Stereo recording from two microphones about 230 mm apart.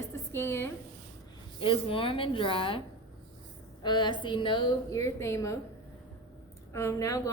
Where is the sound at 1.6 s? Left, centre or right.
Left.